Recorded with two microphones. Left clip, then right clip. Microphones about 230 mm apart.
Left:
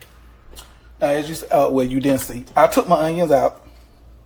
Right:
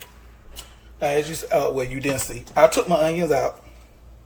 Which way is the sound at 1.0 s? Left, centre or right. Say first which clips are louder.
Left 3 dB; left.